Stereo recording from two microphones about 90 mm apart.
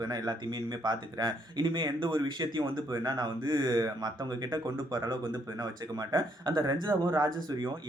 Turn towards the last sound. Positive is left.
turn(degrees=-50)  # may be behind; listen again after turning